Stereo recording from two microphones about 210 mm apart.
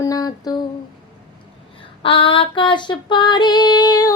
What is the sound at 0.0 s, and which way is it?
Humming, 15° left (ahead or behind).